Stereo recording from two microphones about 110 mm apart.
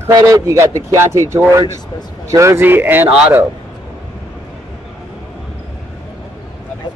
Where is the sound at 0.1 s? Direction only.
35° right (ahead or behind); by 3.1 s 20° right (ahead or behind).